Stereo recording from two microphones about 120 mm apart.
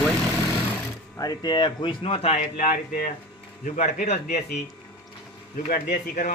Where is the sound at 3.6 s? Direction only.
90° left.